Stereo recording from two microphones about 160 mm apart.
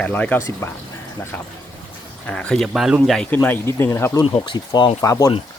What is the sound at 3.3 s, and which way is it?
Speech, 10° left (ahead or behind).